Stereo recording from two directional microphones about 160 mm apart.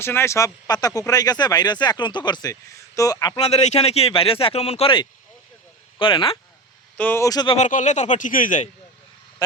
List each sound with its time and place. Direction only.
0.0 s speech: 15° left (ahead or behind)
3.4 s speech: 45° left (ahead or behind)
6.9 s speech: 10° left (ahead or behind)
7.5 s speech: 50° left (ahead or behind)